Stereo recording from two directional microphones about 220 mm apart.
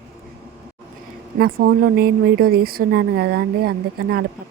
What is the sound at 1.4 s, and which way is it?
Speech, 45° right (ahead or behind).